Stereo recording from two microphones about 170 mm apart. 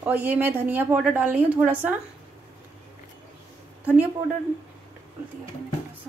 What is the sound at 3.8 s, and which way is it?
Speech, 5° right (ahead or behind).